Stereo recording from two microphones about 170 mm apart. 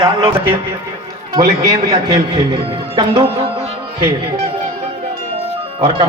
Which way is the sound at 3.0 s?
35° right (ahead or behind).